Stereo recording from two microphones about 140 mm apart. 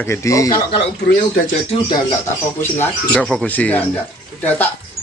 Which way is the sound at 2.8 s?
10° left (ahead or behind).